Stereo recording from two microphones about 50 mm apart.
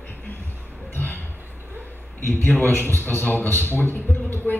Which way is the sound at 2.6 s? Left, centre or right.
Left.